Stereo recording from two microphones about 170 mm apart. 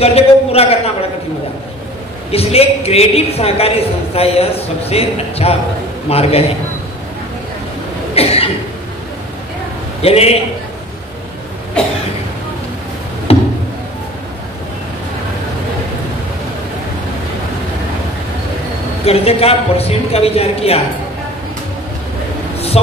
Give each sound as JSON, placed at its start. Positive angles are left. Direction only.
{"t": 0.0, "sound": "a sound", "side_deg": 35}
{"t": 2.3, "sound": "a woman's voice", "side_deg": 35}
{"t": 8.1, "sound": "cough", "side_deg": 35}
{"t": 10.0, "sound": "a woman's voice", "side_deg": 35}
{"t": 13.3, "sound": "a sound", "side_deg": 35}
{"t": 19.0, "sound": "a woman's voice", "side_deg": 35}